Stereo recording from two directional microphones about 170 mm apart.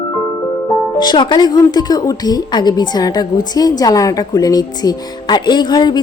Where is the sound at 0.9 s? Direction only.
25° left (ahead or behind).